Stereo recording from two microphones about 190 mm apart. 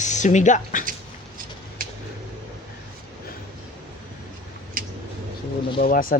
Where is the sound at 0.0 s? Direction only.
40° left (ahead or behind).